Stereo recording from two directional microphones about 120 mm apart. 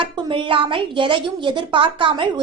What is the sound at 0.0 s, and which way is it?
A woman's voice, 45° right (ahead or behind).